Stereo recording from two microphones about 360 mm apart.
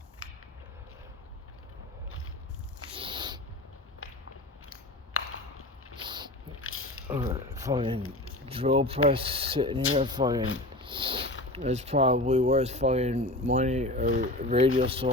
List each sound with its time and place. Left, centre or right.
2.9 s spray: centre
4.7 s a sound: left
6.0 s a sound: centre
6.6 s a sound: left
7.1 s speech: centre
8.0 s speech: left
8.4 s speech: centre
13.2 s speech: centre
13.5 s speech: centre